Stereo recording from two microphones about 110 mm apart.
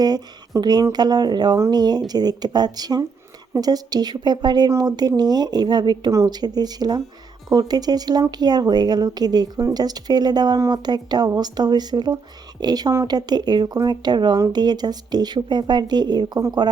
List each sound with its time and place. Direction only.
0.0 s a woman's voice: 35° right (ahead or behind)